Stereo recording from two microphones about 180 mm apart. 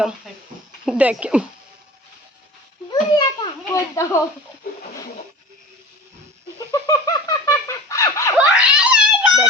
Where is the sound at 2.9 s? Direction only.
25° left (ahead or behind).